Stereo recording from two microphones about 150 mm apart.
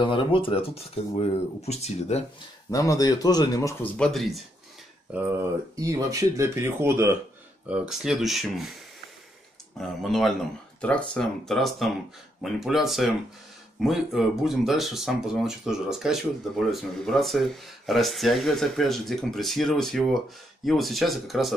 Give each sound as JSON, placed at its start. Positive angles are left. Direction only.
{"t": 0.0, "sound": "speech", "side_deg": 35}
{"t": 2.7, "sound": "speech", "side_deg": 20}
{"t": 3.8, "sound": "speech", "side_deg": 10}
{"t": 5.8, "sound": "speech", "side_deg": -20}
{"t": 9.8, "sound": "speech", "side_deg": 0}